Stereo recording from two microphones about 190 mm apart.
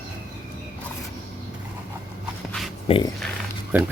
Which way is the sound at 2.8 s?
30° left (ahead or behind).